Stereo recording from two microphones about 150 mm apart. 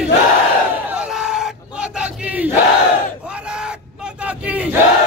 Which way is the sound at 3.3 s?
5° right (ahead or behind).